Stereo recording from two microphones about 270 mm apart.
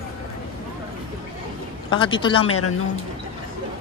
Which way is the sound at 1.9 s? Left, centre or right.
Centre.